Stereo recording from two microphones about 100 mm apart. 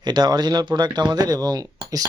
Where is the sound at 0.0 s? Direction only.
45° right (ahead or behind).